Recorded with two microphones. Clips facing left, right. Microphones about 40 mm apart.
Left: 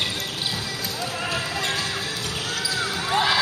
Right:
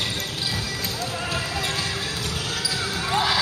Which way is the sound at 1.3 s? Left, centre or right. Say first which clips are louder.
Left 1 dB; centre.